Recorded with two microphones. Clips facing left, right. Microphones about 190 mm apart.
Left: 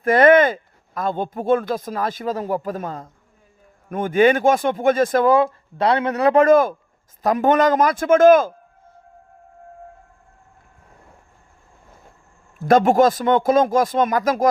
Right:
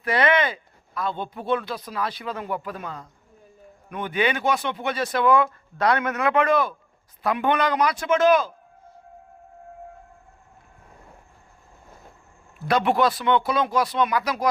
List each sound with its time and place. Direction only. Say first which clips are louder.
0.0 s speech: left 9 dB; 50° left (ahead or behind)
12.5 s speech: left 7 dB; 45° left (ahead or behind)